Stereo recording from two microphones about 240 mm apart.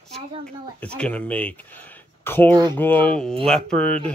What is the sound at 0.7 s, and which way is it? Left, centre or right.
Speech, centre.